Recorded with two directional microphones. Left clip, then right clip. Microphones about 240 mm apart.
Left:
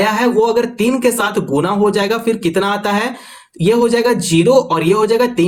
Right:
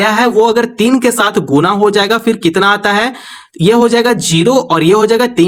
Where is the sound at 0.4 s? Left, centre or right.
Right.